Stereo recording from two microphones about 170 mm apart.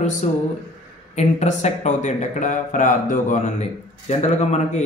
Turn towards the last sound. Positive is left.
turn(degrees=40)  # may be behind; listen again after turning